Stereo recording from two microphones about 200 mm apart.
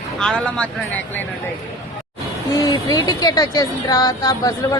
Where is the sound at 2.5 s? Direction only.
20° left (ahead or behind).